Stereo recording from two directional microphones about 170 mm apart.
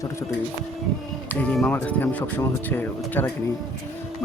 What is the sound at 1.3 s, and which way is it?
Speech, 10° left (ahead or behind).